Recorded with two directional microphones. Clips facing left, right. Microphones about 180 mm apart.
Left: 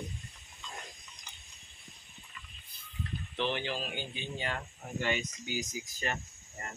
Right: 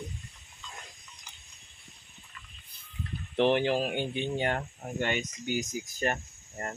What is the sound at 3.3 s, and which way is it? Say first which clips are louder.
Speech: right 10 dB; 60° right (ahead or behind).